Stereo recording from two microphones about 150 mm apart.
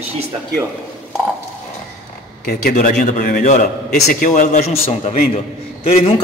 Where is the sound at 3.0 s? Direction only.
60° left (ahead or behind).